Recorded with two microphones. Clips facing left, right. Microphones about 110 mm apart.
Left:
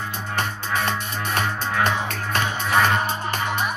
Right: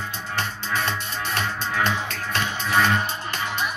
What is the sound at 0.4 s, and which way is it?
Music, 50° left (ahead or behind).